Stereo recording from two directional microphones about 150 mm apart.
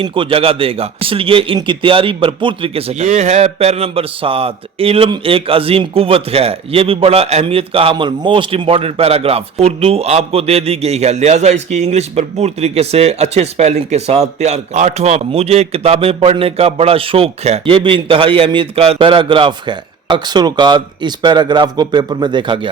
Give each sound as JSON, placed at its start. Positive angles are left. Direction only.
{"t": 0.0, "sound": "a man's voice", "side_deg": -35}